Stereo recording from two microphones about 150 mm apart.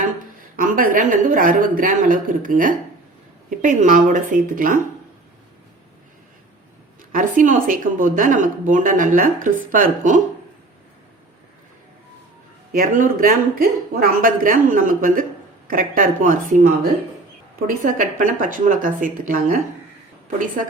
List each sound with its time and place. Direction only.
0.5 s speech: 70° right (ahead or behind)
7.1 s speech: 60° right (ahead or behind)
12.7 s speech: 70° right (ahead or behind)
17.8 s speech: 65° right (ahead or behind)